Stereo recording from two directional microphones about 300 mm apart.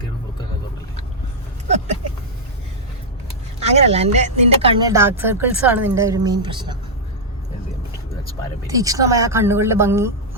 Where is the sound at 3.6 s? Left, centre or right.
Right.